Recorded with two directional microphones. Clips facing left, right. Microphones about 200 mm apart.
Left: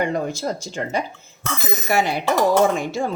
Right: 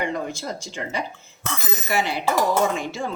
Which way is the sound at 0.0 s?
40° left (ahead or behind).